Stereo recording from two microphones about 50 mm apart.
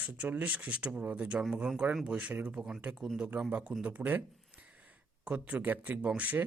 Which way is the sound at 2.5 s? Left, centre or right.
Centre.